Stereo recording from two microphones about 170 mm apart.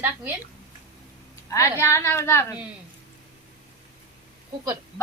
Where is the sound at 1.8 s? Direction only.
15° left (ahead or behind).